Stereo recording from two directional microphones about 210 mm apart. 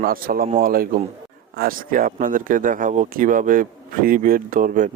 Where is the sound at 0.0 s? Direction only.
45° right (ahead or behind).